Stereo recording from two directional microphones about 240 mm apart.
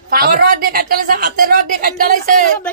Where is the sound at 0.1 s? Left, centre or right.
Right.